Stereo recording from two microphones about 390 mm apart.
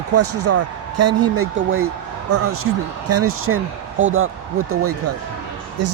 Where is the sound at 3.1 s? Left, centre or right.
Right.